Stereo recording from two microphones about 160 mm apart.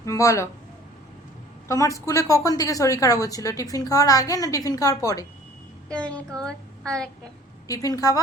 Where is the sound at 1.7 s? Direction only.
20° left (ahead or behind).